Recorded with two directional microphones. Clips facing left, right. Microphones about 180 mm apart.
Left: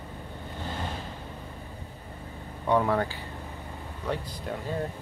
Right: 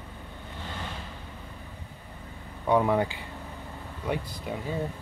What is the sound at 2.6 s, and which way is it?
Speech, 10° right (ahead or behind).